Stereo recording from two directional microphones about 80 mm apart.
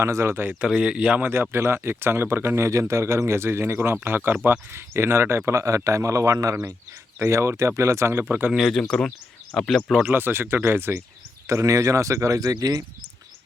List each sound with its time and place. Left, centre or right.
0.0 s speech: right
0.6 s speech: centre
1.2 s speech: right
5.5 s speech: right
8.2 s speech: right
8.5 s speech: centre
10.1 s speech: right
11.4 s speech: right